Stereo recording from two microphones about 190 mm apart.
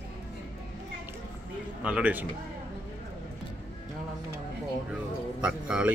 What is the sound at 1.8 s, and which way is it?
Speech, 5° right (ahead or behind).